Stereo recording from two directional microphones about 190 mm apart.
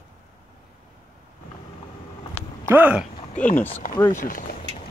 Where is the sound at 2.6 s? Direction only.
10° right (ahead or behind).